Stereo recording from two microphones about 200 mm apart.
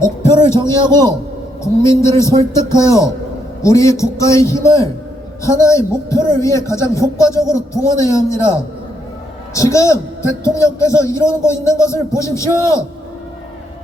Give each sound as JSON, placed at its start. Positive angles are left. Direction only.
{"t": 0.0, "sound": "music", "side_deg": 15}
{"t": 0.7, "sound": "a man's voice", "side_deg": -20}
{"t": 1.6, "sound": "a man's voice", "side_deg": 15}
{"t": 9.6, "sound": "a man's voice", "side_deg": 15}